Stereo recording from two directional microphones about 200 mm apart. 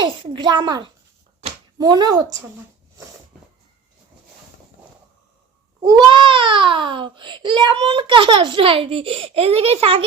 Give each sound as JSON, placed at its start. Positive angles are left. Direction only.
{"t": 0.0, "sound": "a child's voice", "side_deg": -25}
{"t": 5.8, "sound": "a child's voice", "side_deg": -20}